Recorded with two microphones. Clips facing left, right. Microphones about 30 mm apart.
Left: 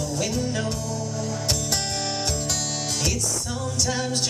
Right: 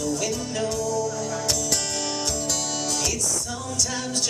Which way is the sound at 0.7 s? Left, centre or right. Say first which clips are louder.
Right 4 dB; left.